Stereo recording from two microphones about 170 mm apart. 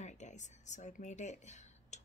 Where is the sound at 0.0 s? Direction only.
45° left (ahead or behind).